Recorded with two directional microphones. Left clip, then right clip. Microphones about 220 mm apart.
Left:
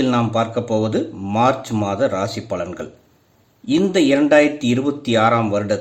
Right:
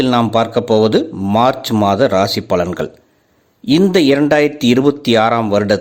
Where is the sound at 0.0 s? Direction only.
40° right (ahead or behind).